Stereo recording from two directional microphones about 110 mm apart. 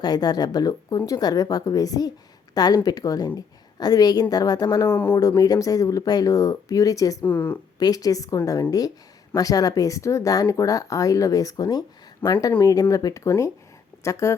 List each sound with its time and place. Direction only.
0.0 s speech: 40° left (ahead or behind)
4.9 s speech: 20° left (ahead or behind)
5.2 s speech: 35° left (ahead or behind)
7.3 s speech: 15° left (ahead or behind)
7.8 s speech: 35° left (ahead or behind)